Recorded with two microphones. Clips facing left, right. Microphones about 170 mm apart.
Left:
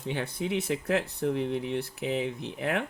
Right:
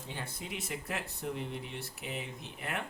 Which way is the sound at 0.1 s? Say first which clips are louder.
Left 12 dB; 75° left (ahead or behind).